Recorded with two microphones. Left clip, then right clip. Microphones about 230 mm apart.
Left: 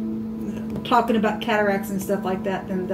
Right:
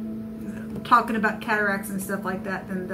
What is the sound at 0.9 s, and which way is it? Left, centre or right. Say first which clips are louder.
Speech: even; right.